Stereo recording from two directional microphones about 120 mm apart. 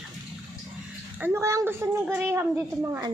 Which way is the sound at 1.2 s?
25° right (ahead or behind).